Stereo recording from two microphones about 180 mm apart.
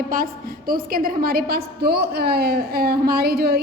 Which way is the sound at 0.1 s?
50° right (ahead or behind).